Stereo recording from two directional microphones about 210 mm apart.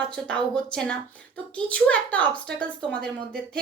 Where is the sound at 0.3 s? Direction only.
5° left (ahead or behind).